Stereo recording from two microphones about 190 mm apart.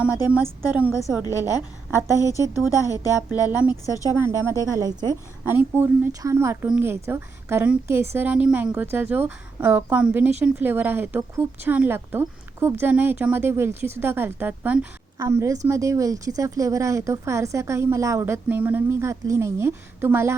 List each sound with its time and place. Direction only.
0.0 s speech: 10° right (ahead or behind)
1.2 s a woman's voice: 20° left (ahead or behind)
3.5 s speech: 10° right (ahead or behind)